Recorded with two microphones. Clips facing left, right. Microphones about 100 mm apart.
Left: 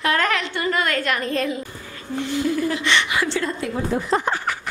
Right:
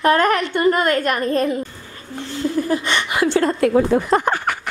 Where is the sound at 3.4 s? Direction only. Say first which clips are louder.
Right 9 dB; 65° right (ahead or behind).